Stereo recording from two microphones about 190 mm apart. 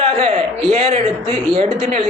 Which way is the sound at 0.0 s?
30° right (ahead or behind).